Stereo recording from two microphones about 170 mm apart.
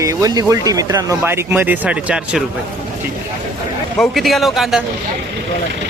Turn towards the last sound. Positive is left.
turn(degrees=0)  # may be behind; listen again after turning